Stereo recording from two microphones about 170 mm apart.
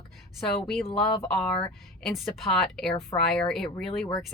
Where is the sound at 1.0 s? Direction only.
5° left (ahead or behind).